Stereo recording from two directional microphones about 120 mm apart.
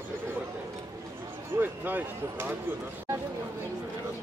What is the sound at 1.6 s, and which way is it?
Speech, 15° right (ahead or behind).